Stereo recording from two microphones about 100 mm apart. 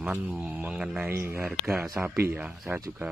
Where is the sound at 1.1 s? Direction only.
25° right (ahead or behind).